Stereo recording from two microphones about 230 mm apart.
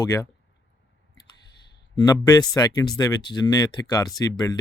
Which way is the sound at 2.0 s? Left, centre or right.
Centre.